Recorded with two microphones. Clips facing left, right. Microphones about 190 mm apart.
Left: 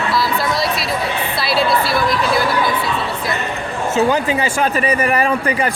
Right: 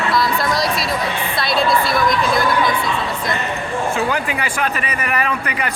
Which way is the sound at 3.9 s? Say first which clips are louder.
Left 5 dB; 25° left (ahead or behind).